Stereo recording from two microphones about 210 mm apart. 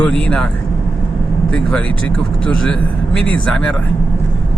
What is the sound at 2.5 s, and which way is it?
Speech, 5° left (ahead or behind).